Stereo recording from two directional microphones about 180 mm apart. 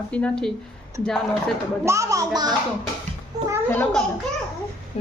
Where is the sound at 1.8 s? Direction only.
15° right (ahead or behind).